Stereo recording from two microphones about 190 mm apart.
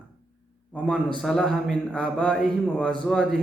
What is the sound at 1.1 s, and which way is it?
A man's voice, centre (ahead or behind).